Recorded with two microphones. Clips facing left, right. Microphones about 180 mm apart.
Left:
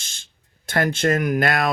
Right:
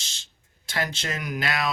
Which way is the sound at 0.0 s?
50° left (ahead or behind).